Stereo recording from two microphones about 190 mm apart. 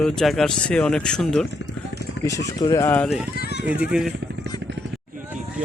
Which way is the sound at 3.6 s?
5° right (ahead or behind).